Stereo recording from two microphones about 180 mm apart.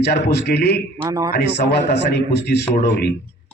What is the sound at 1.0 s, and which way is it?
Speech, 20° right (ahead or behind).